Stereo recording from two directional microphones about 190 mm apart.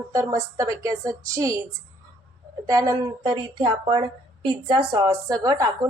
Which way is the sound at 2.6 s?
15° right (ahead or behind).